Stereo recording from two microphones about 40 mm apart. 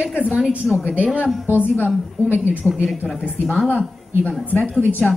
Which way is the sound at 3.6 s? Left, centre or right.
Left.